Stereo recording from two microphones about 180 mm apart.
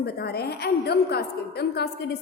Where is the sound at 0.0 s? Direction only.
60° left (ahead or behind).